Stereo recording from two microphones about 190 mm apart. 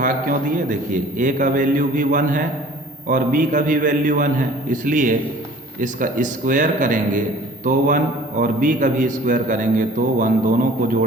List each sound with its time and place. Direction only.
0.0 s a man's voice: 45° right (ahead or behind)